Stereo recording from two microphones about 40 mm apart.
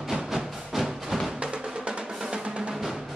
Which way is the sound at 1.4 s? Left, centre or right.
Right.